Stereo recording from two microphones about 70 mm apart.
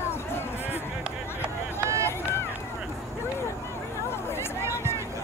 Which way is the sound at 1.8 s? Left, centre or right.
Right.